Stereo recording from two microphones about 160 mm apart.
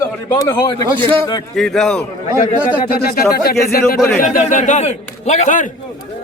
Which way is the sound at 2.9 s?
70° left (ahead or behind).